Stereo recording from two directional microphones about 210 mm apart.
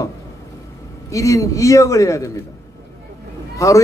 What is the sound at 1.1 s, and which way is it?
A man's voice, 15° left (ahead or behind).